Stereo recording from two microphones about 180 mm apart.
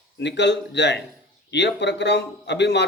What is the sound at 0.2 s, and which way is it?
A man's voice, 75° left (ahead or behind).